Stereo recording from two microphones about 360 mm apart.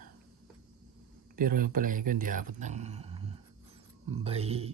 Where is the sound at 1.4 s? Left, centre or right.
Right.